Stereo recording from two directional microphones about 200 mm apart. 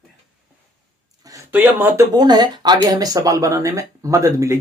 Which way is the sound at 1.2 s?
15° right (ahead or behind).